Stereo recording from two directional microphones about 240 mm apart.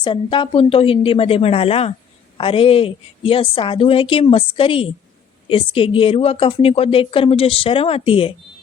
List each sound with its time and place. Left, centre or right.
0.0 s speech: left